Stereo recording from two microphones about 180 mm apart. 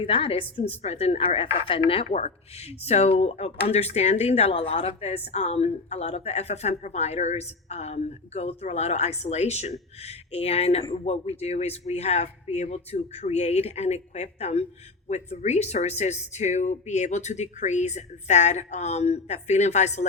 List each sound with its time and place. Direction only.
0.0 s a woman's voice: 30° left (ahead or behind)